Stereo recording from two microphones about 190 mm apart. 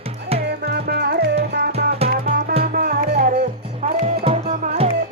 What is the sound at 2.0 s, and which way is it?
Music, 30° right (ahead or behind).